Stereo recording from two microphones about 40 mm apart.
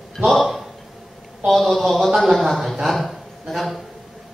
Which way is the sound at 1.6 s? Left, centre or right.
Centre.